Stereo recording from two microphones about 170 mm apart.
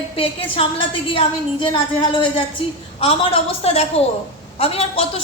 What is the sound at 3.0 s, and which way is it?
A woman's voice, 35° left (ahead or behind).